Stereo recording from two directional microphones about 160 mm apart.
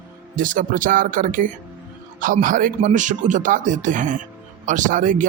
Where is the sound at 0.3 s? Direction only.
55° right (ahead or behind).